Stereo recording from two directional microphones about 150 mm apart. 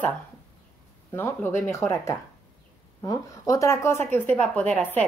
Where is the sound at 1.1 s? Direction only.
15° left (ahead or behind).